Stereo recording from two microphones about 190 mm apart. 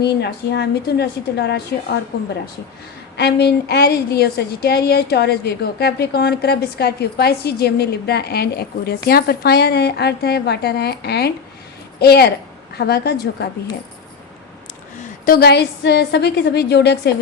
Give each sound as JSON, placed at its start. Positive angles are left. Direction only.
{"t": 0.0, "sound": "a woman's voice", "side_deg": 60}
{"t": 3.2, "sound": "a woman's voice", "side_deg": 60}
{"t": 15.2, "sound": "a woman's voice", "side_deg": 55}